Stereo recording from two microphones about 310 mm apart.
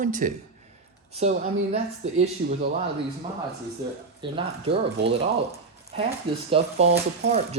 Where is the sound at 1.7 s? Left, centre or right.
Right.